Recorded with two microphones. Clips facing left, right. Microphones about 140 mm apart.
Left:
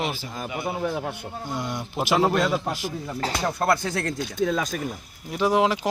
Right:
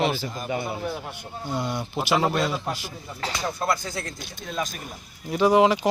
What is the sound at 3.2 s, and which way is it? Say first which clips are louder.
Speech: left 2 dB; 45° left (ahead or behind).